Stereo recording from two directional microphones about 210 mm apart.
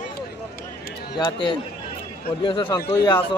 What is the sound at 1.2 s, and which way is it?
A man's voice, 20° left (ahead or behind).